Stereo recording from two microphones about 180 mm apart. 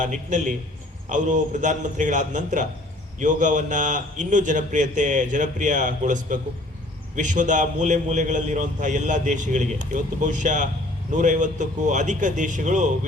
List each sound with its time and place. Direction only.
0.0 s a man's voice: 45° right (ahead or behind)